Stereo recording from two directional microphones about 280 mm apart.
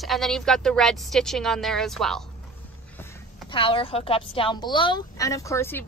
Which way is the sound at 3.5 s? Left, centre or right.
Centre.